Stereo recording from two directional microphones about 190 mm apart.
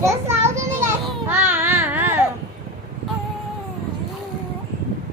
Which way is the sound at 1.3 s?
10° right (ahead or behind).